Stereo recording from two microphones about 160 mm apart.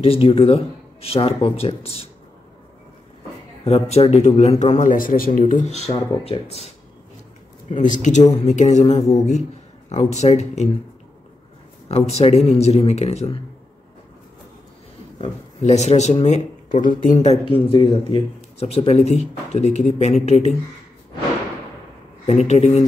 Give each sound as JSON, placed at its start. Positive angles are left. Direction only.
{"t": 0.0, "sound": "speech", "side_deg": 35}
{"t": 3.6, "sound": "speech", "side_deg": 40}
{"t": 4.7, "sound": "a man's voice", "side_deg": 55}
{"t": 5.9, "sound": "speech", "side_deg": 40}
{"t": 7.7, "sound": "speech", "side_deg": 50}
{"t": 11.9, "sound": "speech", "side_deg": 40}
{"t": 15.1, "sound": "speech", "side_deg": 45}
{"t": 22.5, "sound": "speech", "side_deg": 45}